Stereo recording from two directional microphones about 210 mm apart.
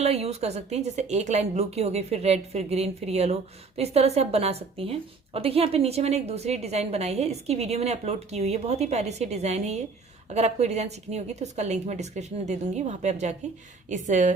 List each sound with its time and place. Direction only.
0.0 s a woman's voice: 30° right (ahead or behind)